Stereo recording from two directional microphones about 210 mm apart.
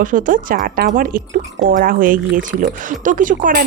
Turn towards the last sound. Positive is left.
turn(degrees=-40)  # may be behind; listen again after turning